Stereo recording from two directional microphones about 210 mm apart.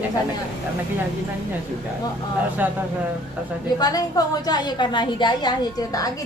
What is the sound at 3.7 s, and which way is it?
A woman's voice, 20° left (ahead or behind).